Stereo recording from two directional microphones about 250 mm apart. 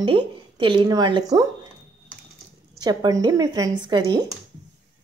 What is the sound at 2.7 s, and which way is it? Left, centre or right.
Speech, centre.